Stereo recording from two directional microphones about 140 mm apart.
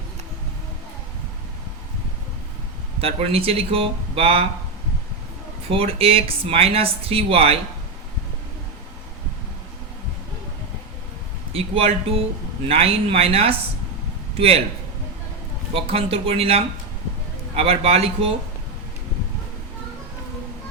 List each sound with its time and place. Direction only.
3.0 s speech: 45° right (ahead or behind)
5.6 s speech: 45° right (ahead or behind)
11.5 s speech: 45° right (ahead or behind)
15.7 s speech: 45° right (ahead or behind)